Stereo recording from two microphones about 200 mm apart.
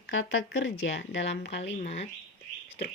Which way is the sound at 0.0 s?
70° left (ahead or behind).